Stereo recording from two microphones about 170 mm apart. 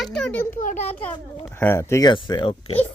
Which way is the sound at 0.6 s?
45° left (ahead or behind).